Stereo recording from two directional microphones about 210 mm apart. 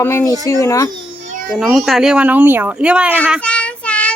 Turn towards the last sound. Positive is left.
turn(degrees=5)  # may be behind; listen again after turning